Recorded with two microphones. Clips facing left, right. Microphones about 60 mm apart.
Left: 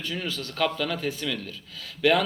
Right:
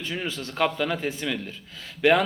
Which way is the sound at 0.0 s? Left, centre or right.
Right.